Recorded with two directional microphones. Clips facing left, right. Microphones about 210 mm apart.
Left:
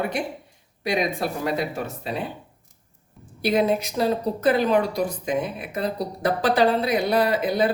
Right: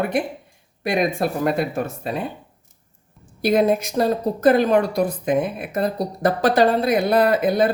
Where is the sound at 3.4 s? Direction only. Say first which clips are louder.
Right 3 dB; 45° right (ahead or behind).